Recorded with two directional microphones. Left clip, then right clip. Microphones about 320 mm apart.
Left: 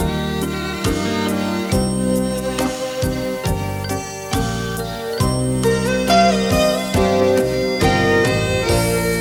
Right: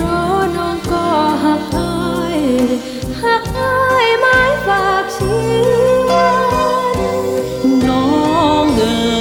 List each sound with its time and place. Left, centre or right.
6.1 s music: right